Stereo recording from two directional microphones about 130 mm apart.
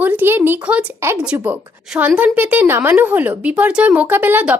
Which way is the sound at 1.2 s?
10° right (ahead or behind).